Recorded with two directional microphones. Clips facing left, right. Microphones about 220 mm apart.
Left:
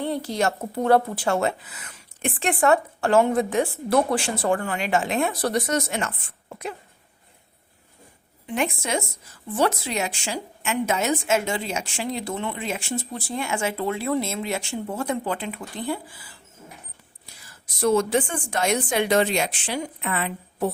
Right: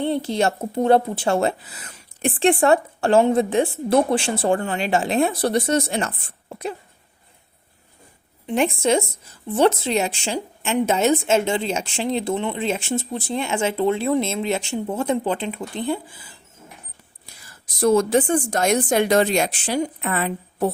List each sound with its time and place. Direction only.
0.0 s a woman's voice: 25° right (ahead or behind)
8.4 s a woman's voice: 30° right (ahead or behind)
17.4 s a woman's voice: 40° right (ahead or behind)